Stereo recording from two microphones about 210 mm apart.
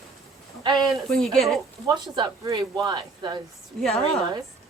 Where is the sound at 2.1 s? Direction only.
20° right (ahead or behind).